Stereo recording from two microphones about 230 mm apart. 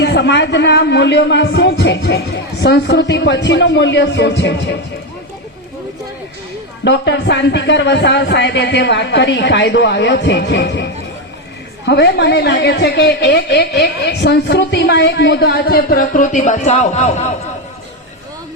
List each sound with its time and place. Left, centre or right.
0.0 s a woman's voice: left
6.8 s a woman's voice: left